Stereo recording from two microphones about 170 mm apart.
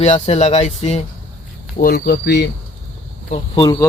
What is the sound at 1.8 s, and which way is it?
Speech, 65° left (ahead or behind).